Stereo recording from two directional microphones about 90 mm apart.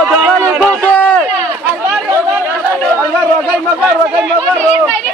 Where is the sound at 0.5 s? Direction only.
20° right (ahead or behind).